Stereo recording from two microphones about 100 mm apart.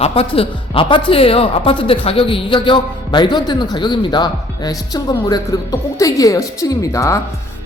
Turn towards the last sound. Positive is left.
turn(degrees=30)  # may be behind; listen again after turning